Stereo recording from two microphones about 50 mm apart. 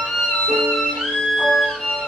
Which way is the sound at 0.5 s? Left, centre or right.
Centre.